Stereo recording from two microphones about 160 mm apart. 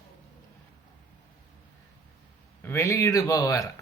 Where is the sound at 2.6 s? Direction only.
15° left (ahead or behind).